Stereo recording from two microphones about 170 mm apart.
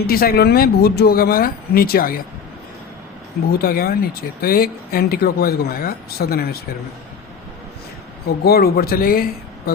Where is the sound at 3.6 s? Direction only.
60° left (ahead or behind).